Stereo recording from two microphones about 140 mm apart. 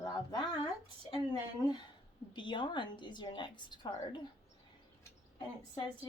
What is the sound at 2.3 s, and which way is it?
A woman's voice, 35° left (ahead or behind).